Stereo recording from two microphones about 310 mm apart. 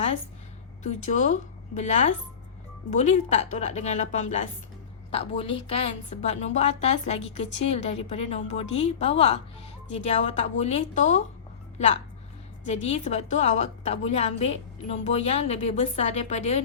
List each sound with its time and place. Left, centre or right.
0.9 s a woman's voice: left
12.6 s a woman's voice: left